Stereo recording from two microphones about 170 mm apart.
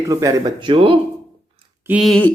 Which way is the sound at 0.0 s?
20° right (ahead or behind).